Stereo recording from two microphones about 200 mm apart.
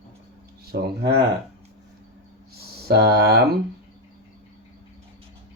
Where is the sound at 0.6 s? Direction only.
50° right (ahead or behind).